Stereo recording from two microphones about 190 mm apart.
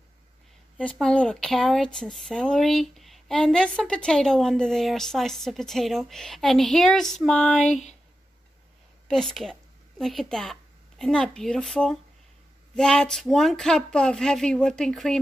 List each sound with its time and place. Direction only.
0.7 s speech: 5° left (ahead or behind)
7.6 s speech: 40° left (ahead or behind)
9.0 s a woman's voice: 5° left (ahead or behind)